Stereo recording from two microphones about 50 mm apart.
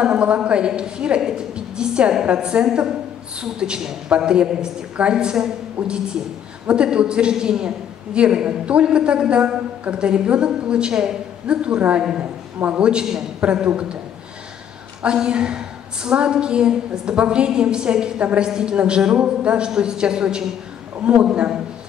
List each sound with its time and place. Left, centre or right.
0.0 s a man's voice: centre
15.0 s a woman's voice: centre
21.0 s a man's voice: right
21.3 s a woman's voice: centre